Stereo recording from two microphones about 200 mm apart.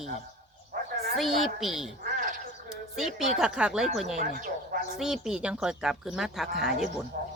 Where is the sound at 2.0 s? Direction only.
40° right (ahead or behind).